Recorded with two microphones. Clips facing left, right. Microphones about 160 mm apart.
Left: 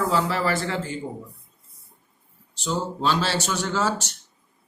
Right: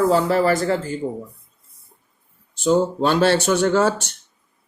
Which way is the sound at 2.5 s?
50° right (ahead or behind).